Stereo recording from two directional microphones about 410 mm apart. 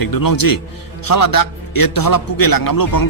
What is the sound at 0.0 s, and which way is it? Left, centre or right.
A man's voice, left.